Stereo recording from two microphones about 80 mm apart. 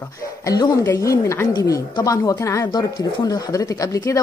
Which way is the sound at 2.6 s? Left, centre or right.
Left.